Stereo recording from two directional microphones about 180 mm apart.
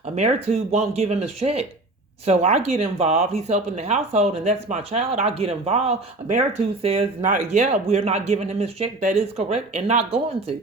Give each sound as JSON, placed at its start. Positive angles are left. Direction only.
{"t": 0.2, "sound": "speech", "side_deg": -35}